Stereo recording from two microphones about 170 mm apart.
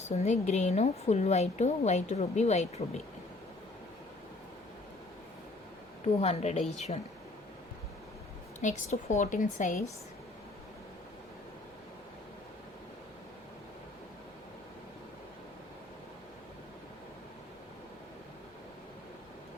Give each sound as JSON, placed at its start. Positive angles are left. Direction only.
{"t": 0.0, "sound": "a woman's voice", "side_deg": 40}
{"t": 6.1, "sound": "a woman's voice", "side_deg": 40}
{"t": 8.6, "sound": "a woman's voice", "side_deg": 45}